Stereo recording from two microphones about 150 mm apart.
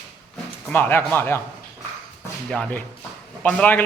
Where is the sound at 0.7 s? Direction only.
15° left (ahead or behind).